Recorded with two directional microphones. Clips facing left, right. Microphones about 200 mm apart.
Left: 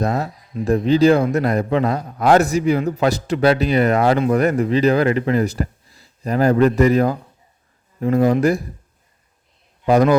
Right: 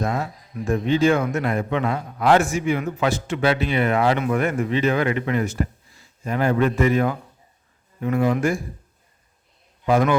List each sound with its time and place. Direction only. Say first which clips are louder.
0.0 s a man's voice: left 4 dB; 40° left (ahead or behind)
9.8 s speech: left 5 dB; 40° left (ahead or behind)